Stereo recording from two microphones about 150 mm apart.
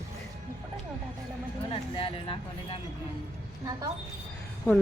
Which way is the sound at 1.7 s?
35° left (ahead or behind).